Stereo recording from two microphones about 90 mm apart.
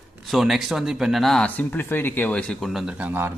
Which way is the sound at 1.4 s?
20° left (ahead or behind).